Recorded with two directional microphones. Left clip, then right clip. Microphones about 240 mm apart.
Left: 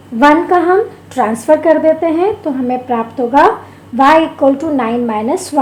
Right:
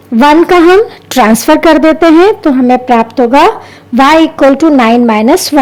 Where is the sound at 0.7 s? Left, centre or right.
Right.